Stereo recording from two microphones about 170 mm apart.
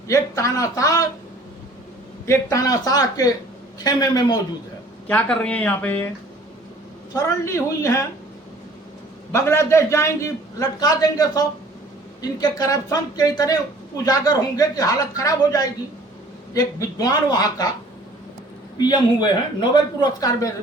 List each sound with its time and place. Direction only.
0.1 s a man's voice: 20° left (ahead or behind)
2.2 s a man's voice: 15° left (ahead or behind)
5.0 s a man's voice: 5° left (ahead or behind)
7.4 s a man's voice: 15° left (ahead or behind)
9.3 s a man's voice: 15° left (ahead or behind)
18.8 s a man's voice: 25° left (ahead or behind)